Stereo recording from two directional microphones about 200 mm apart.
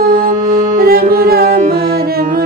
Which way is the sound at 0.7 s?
50° right (ahead or behind).